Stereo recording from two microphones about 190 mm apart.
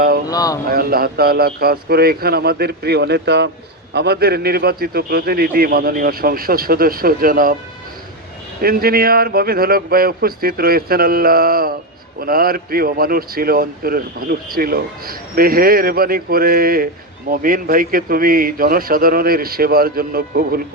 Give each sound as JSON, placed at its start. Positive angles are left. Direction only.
{"t": 0.3, "sound": "speech", "side_deg": 20}
{"t": 0.7, "sound": "a man's voice", "side_deg": -50}
{"t": 8.6, "sound": "speech", "side_deg": -50}